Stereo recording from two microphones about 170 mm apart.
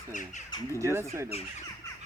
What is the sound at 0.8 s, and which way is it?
Speech, 15° right (ahead or behind).